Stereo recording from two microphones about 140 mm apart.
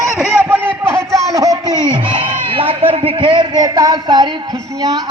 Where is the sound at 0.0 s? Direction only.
5° right (ahead or behind).